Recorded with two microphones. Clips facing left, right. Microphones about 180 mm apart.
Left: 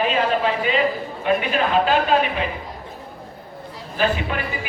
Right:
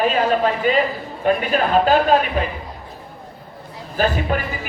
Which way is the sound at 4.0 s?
45° right (ahead or behind).